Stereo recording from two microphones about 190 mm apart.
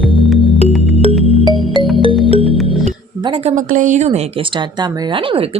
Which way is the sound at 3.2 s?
30° right (ahead or behind).